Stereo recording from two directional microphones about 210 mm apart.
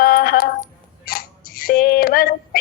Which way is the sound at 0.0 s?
45° left (ahead or behind).